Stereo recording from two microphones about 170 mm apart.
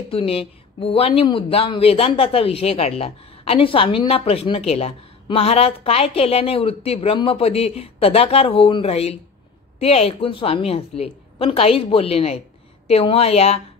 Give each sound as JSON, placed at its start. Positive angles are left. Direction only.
{"t": 0.1, "sound": "speech", "side_deg": 35}